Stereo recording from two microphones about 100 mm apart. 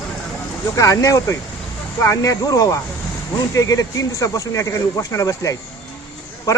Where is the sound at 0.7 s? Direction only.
30° left (ahead or behind).